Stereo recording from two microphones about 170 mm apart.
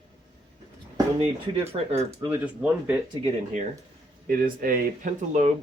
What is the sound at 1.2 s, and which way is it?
Speech, 35° right (ahead or behind).